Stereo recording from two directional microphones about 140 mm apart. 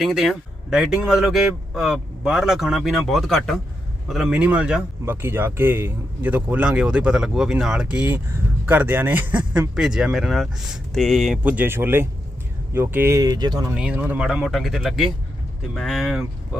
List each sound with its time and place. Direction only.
0.0 s a man's voice: centre (ahead or behind); by 13.7 s 30° right (ahead or behind)
13.7 s speech: 10° right (ahead or behind)
14.3 s a man's voice: centre (ahead or behind)